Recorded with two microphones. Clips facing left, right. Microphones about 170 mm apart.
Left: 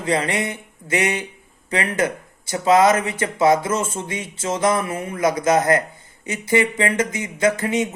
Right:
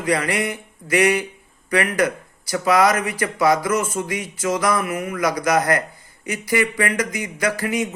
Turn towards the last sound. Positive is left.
turn(degrees=25)  # may be behind; listen again after turning